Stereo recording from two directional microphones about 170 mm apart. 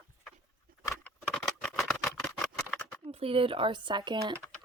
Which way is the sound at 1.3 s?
5° left (ahead or behind).